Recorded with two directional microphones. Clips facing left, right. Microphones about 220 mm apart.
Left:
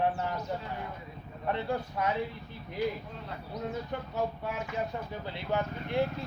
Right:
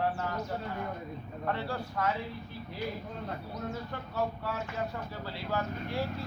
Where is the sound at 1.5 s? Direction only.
20° left (ahead or behind).